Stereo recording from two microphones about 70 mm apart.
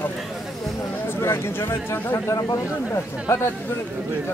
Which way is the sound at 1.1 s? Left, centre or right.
Left.